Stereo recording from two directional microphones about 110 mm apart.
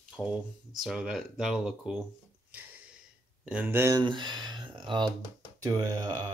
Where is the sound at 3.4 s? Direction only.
15° right (ahead or behind).